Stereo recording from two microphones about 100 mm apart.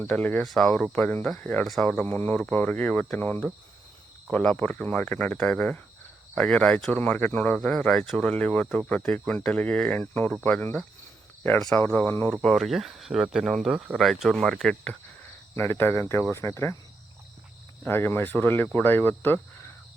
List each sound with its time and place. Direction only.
0.0 s speech: 15° left (ahead or behind)
11.8 s speech: 20° left (ahead or behind)
12.3 s speech: 5° left (ahead or behind)
15.5 s speech: 20° left (ahead or behind)
17.8 s speech: 20° left (ahead or behind)